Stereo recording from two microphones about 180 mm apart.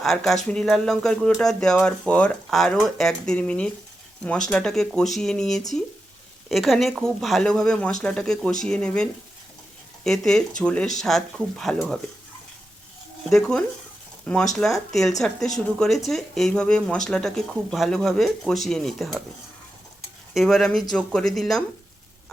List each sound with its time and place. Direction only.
0.0 s speech: centre (ahead or behind)
13.3 s speech: 5° left (ahead or behind)
20.3 s speech: centre (ahead or behind)